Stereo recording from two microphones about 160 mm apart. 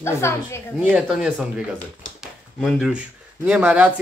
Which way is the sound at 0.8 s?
5° right (ahead or behind).